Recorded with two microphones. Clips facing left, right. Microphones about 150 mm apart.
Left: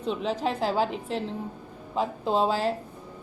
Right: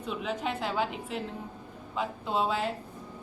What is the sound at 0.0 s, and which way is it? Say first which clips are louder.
Speech: left 5 dB; 30° left (ahead or behind).